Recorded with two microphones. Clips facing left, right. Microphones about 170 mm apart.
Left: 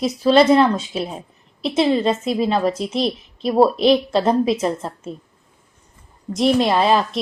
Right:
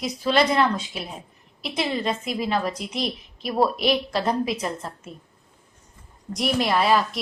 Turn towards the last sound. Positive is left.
turn(degrees=25)  # may be behind; listen again after turning